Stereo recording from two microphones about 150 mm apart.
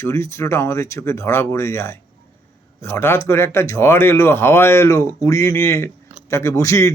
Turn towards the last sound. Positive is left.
turn(degrees=20)  # may be behind; listen again after turning